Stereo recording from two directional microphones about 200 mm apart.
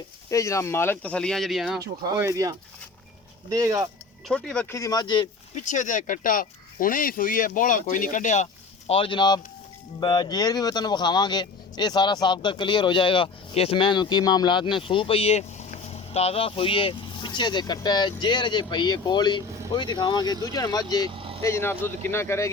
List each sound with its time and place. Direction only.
0.3 s speech: 15° left (ahead or behind); by 1.8 s centre (ahead or behind)
2.0 s speech: 15° right (ahead or behind)
4.3 s speech: 5° left (ahead or behind)
4.8 s speech: 20° left (ahead or behind)
5.5 s speech: 40° left (ahead or behind)
8.9 s speech: 25° left (ahead or behind)